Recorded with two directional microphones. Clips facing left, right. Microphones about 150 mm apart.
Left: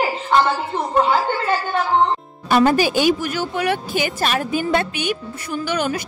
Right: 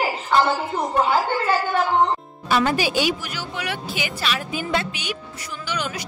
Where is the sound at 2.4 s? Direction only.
50° left (ahead or behind).